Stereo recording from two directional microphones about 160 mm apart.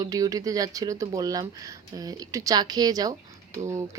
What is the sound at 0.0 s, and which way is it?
Speech, 20° right (ahead or behind).